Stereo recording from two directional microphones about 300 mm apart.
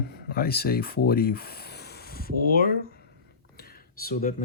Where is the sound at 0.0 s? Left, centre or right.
Left.